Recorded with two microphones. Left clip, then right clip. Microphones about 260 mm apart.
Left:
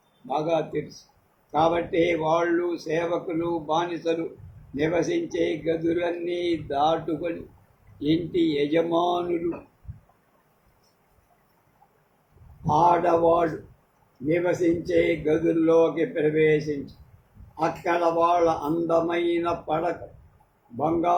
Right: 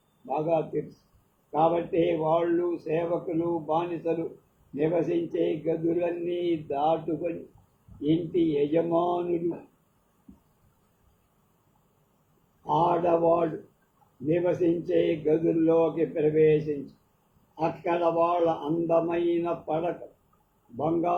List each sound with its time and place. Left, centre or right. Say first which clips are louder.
0.3 s speech: left 2 dB; left
8.7 s speech: left 2 dB; left
12.6 s speech: left 4 dB; left